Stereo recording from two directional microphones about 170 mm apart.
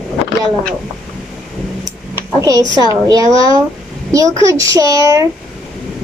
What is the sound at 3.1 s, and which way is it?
A child's voice, 20° right (ahead or behind).